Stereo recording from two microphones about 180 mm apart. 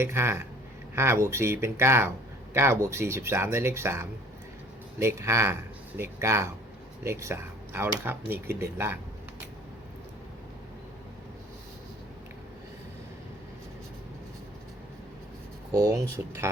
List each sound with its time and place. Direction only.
0.0 s speech: 15° right (ahead or behind)
15.7 s speech: 20° right (ahead or behind)